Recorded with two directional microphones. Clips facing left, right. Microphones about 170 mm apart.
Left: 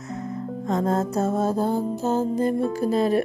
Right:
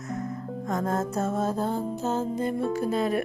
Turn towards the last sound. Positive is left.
turn(degrees=35)  # may be behind; listen again after turning